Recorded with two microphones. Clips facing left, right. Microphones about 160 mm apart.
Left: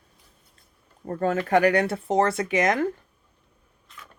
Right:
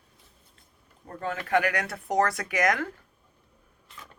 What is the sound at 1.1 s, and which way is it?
Speech, 45° left (ahead or behind).